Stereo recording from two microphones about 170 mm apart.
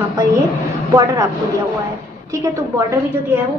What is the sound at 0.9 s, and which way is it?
A woman's voice, 20° right (ahead or behind).